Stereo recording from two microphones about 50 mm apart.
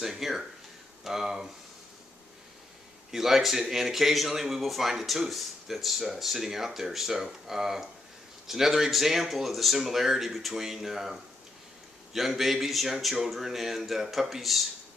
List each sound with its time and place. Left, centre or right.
0.0 s a man's voice: centre
3.1 s a man's voice: centre